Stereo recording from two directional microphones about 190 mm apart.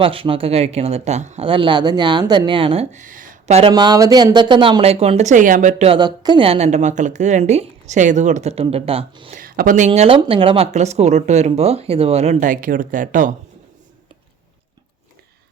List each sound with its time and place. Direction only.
0.0 s speech: 30° right (ahead or behind)
3.7 s speech: 20° right (ahead or behind); by 5.9 s 40° right (ahead or behind)
5.9 s speech: 20° right (ahead or behind)
9.3 s speech: 50° right (ahead or behind)